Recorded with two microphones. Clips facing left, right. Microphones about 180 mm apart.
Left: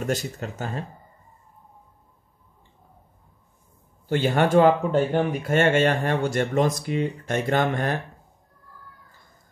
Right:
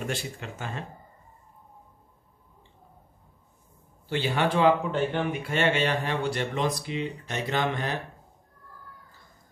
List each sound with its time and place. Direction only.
0.0 s speech: 40° left (ahead or behind)
4.1 s speech: 45° left (ahead or behind)